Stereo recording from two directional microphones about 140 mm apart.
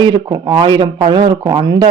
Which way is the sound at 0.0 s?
30° right (ahead or behind).